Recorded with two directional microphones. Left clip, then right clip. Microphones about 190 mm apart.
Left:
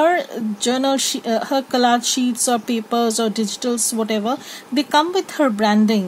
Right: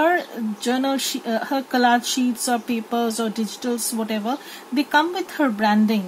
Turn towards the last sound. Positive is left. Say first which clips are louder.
# left 2 dB
turn(degrees=50)  # may be behind; listen again after turning